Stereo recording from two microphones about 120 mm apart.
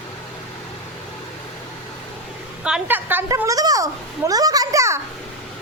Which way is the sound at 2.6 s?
10° right (ahead or behind).